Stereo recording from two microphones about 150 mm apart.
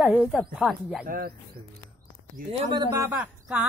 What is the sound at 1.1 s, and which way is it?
Speech, 80° right.